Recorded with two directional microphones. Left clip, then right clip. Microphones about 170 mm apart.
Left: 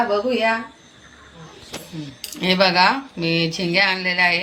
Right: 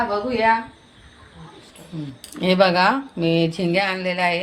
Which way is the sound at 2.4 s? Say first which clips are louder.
Left 1 dB; 50° right (ahead or behind).